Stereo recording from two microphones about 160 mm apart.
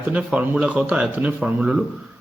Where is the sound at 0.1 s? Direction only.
10° right (ahead or behind).